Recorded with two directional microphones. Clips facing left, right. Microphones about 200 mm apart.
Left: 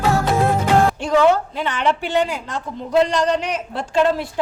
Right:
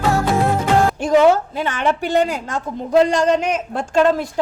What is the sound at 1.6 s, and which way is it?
A man's voice, 45° right (ahead or behind).